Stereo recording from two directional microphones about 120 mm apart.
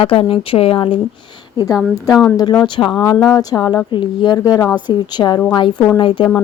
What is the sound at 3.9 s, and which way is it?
Speech, 45° left (ahead or behind).